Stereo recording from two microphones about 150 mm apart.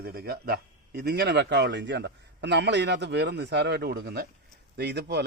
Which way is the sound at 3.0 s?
90° right.